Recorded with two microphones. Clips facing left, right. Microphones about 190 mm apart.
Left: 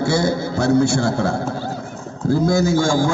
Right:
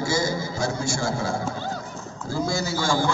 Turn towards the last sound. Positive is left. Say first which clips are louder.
# left 7 dB
turn(degrees=45)  # may be behind; listen again after turning